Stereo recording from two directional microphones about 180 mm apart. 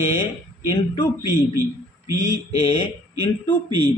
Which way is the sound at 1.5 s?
15° right (ahead or behind).